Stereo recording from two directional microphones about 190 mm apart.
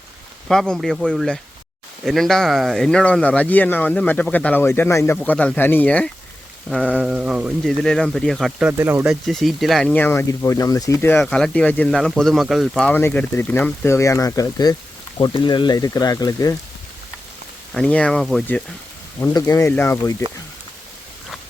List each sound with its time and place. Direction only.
0.4 s speech: centre (ahead or behind)
9.0 s speech: centre (ahead or behind)
11.2 s speech: 5° left (ahead or behind)
17.7 s speech: 5° left (ahead or behind)
19.2 s speech: 20° left (ahead or behind)